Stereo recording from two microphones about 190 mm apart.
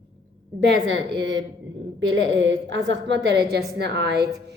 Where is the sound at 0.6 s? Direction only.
60° right (ahead or behind).